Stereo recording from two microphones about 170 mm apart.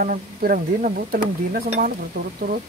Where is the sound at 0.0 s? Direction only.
55° right (ahead or behind).